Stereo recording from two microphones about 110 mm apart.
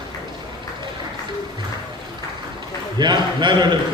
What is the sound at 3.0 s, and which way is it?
Speech, 40° right (ahead or behind).